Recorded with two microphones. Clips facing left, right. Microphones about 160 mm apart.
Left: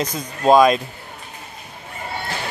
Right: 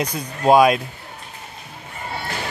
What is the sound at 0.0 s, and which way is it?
Speech, 10° right (ahead or behind).